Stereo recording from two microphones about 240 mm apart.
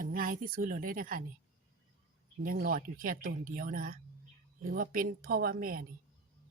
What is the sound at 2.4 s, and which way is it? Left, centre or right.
A woman's voice, right.